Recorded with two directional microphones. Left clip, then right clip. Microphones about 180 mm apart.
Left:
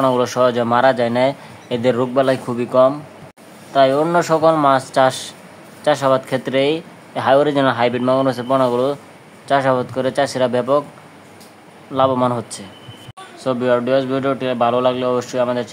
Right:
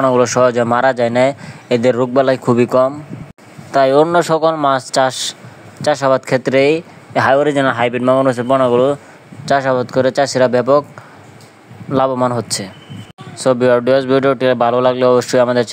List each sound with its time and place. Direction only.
0.0 s speech: 25° right (ahead or behind)
11.9 s speech: 40° right (ahead or behind)